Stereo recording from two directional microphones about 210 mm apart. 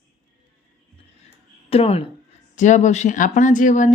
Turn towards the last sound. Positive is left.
turn(degrees=35)  # may be behind; listen again after turning